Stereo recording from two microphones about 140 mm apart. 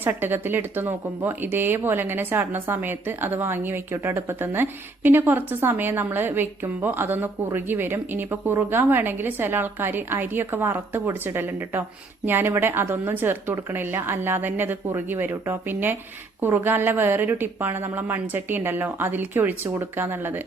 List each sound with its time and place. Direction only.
0.0 s speech: 15° right (ahead or behind)